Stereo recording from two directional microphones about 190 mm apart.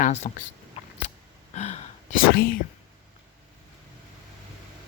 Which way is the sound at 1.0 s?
35° left (ahead or behind).